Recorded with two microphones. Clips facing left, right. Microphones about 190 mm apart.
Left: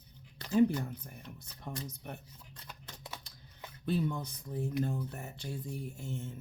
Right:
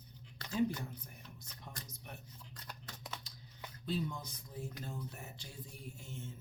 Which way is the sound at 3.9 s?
60° left (ahead or behind).